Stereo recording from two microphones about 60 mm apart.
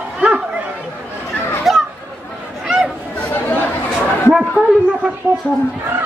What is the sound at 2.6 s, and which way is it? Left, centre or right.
Chatter, centre.